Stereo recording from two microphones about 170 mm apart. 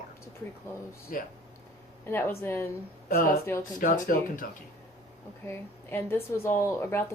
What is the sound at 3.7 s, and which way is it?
Speech, 50° left (ahead or behind).